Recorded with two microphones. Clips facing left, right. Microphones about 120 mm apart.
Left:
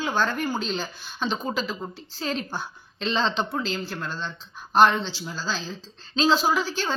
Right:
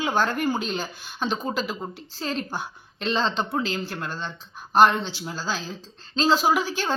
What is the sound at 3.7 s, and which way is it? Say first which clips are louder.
Speech: right 1 dB; 20° right (ahead or behind).